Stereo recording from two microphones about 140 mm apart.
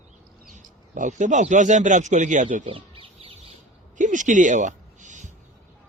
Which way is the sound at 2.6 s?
40° right (ahead or behind).